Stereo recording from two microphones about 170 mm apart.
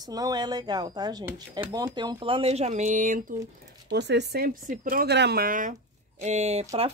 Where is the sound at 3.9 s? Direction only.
85° right; by 5.8 s 50° right (ahead or behind).